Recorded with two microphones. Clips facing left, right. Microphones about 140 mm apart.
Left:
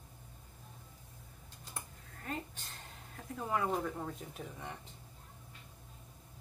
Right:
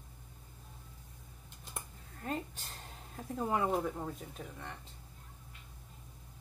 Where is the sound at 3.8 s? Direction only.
10° right (ahead or behind).